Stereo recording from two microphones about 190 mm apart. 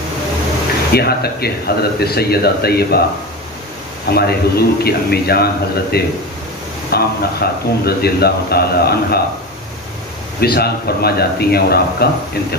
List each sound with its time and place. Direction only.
0.9 s speech: 55° left (ahead or behind)
4.1 s speech: 55° left (ahead or behind)
10.4 s speech: 55° left (ahead or behind)